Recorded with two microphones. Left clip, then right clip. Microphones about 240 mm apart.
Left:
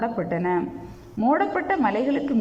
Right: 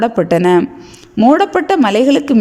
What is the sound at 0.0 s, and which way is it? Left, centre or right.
A woman's voice, right.